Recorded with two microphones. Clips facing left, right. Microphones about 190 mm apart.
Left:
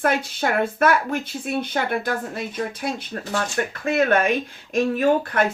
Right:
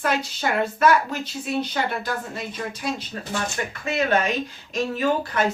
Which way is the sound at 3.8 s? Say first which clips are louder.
Left 3 dB; 55° left (ahead or behind).